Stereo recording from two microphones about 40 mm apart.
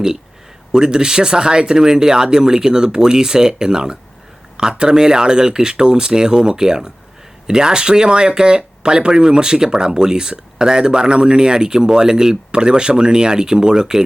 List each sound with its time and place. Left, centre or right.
0.7 s speech: centre